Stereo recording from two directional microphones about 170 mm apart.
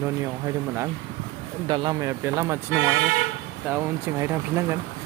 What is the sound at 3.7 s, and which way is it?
Speech, 10° right (ahead or behind).